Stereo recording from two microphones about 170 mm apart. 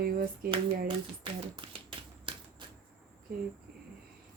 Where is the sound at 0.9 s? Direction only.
30° right (ahead or behind).